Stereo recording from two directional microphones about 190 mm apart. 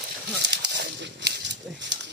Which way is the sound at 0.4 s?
65° right (ahead or behind).